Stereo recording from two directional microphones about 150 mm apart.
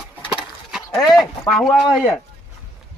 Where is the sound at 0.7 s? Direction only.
Centre (ahead or behind).